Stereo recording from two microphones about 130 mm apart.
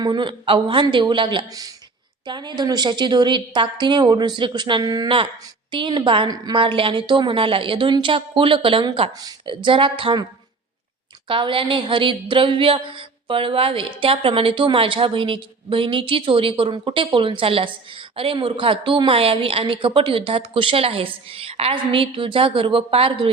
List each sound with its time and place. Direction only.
0.0 s a woman's voice: 35° right (ahead or behind)
11.3 s a woman's voice: 40° right (ahead or behind)